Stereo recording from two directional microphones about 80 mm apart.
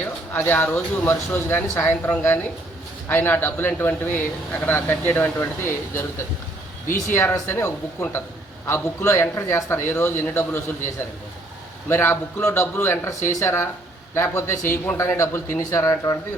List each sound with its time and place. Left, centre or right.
0.3 s speech: left
7.1 s a man's voice: left